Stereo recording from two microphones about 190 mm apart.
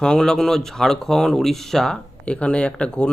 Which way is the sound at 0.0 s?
5° left (ahead or behind).